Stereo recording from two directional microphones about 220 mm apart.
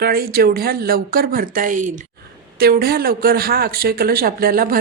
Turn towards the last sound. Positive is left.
turn(degrees=-40)  # may be behind; listen again after turning